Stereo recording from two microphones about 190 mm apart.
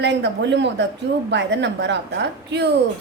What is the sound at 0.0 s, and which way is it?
A woman's voice, 65° right (ahead or behind).